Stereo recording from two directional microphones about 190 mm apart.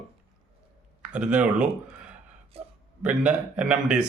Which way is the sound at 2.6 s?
30° right (ahead or behind).